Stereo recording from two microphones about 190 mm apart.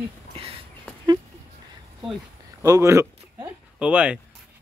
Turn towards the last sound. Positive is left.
turn(degrees=-5)  # may be behind; listen again after turning